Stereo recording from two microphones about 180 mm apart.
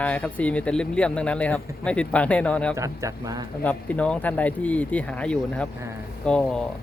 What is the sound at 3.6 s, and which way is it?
Speech, 10° left (ahead or behind).